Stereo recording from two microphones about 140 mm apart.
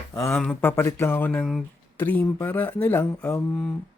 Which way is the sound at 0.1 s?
20° left (ahead or behind).